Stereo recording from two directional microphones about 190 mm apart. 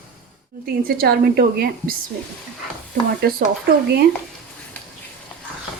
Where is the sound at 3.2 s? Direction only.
55° right (ahead or behind).